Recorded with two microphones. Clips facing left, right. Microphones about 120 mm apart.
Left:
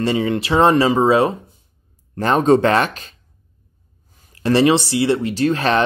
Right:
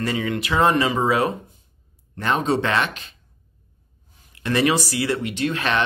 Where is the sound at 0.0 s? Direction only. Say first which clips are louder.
Left 6 dB; 30° left (ahead or behind).